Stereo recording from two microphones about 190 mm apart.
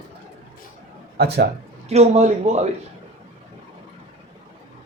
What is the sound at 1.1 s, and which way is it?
Speech, 60° right (ahead or behind).